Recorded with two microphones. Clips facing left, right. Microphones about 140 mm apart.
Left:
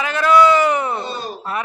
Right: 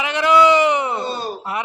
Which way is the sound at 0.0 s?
20° right (ahead or behind).